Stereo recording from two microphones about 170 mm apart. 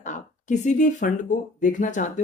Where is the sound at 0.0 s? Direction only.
45° left (ahead or behind).